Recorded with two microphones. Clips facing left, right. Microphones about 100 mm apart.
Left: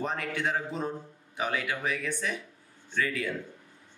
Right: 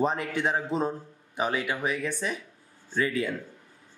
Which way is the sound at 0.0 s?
30° right (ahead or behind).